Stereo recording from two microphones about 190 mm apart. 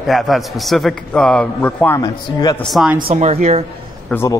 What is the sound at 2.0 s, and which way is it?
Speech, 20° left (ahead or behind).